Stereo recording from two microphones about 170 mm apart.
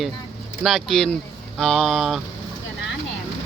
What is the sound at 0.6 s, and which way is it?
Speech, centre (ahead or behind).